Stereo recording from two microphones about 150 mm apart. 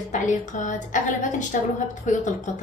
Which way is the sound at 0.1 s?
55° left (ahead or behind).